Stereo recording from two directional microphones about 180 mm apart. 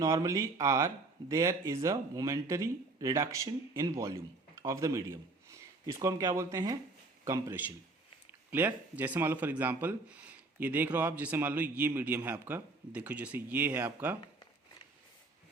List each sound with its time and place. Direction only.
0.0 s speech: 20° right (ahead or behind)